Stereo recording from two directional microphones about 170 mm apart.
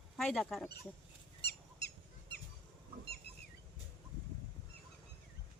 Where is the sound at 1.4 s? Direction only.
80° left.